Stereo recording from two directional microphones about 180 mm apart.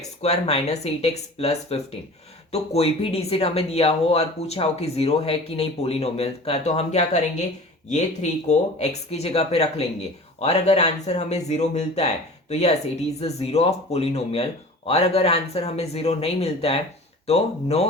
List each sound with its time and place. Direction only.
0.2 s speech: 35° left (ahead or behind)